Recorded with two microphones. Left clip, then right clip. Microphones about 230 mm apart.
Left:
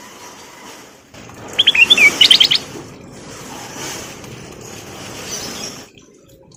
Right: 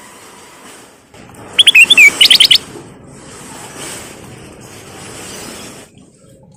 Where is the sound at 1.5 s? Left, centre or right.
Right.